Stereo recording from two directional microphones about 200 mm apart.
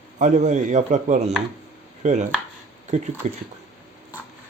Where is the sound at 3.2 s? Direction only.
35° right (ahead or behind).